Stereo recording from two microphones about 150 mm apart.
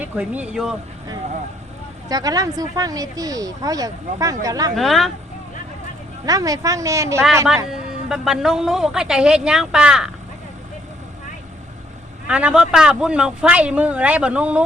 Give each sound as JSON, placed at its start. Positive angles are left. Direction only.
{"t": 0.0, "sound": "speech", "side_deg": -10}
{"t": 2.0, "sound": "speech", "side_deg": -25}
{"t": 4.7, "sound": "a woman's voice", "side_deg": 0}
{"t": 6.2, "sound": "speech", "side_deg": -25}
{"t": 7.7, "sound": "a woman's voice", "side_deg": 0}
{"t": 12.3, "sound": "speech", "side_deg": -10}